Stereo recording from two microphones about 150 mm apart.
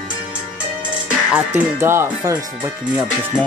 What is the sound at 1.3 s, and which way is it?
Speech, 15° right (ahead or behind).